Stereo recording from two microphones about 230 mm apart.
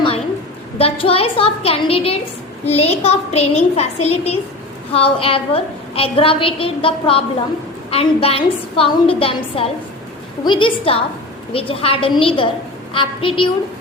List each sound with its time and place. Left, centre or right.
0.8 s a woman's voice: left